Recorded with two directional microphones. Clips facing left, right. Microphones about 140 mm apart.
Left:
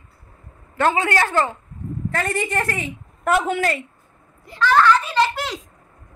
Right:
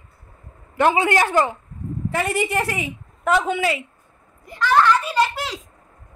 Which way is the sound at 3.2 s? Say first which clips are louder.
Even; 5° left (ahead or behind).